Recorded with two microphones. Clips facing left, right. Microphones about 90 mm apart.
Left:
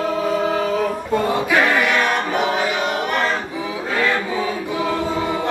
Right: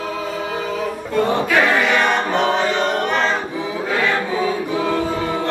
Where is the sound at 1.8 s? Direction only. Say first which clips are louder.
Right 1 dB; 10° left (ahead or behind).